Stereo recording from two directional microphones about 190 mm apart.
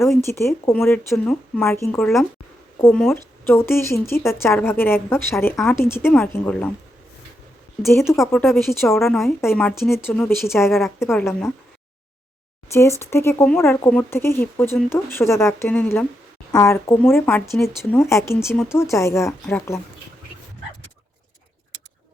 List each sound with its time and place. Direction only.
0.3 s speech: 15° left (ahead or behind)
7.8 s speech: 15° left (ahead or behind)
9.0 s speech: centre (ahead or behind)
10.7 s speech: centre (ahead or behind)
11.0 s speech: 15° left (ahead or behind)
13.0 s speech: 15° left (ahead or behind)